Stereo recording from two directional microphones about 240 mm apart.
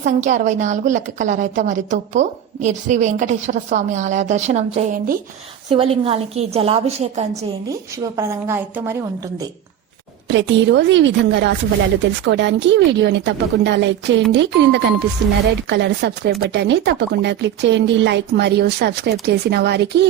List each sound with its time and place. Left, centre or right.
0.0 s a woman's voice: right
7.7 s speech: centre
10.2 s speech: right